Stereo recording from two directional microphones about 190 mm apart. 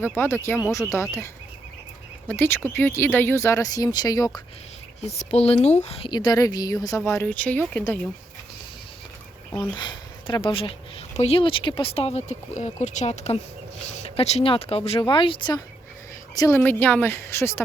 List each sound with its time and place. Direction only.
0.2 s speech: 15° left (ahead or behind)
2.2 s speech: 10° left (ahead or behind)
4.9 s a woman's voice: 35° left (ahead or behind); by 7.9 s 10° left (ahead or behind)
9.5 s a woman's voice: 25° left (ahead or behind)